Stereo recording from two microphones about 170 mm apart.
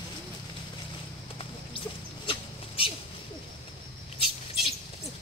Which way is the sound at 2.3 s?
30° left (ahead or behind).